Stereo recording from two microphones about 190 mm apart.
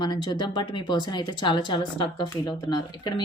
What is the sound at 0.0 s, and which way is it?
Speech, 20° left (ahead or behind).